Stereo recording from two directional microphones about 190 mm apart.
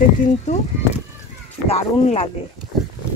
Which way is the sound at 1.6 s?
30° left (ahead or behind).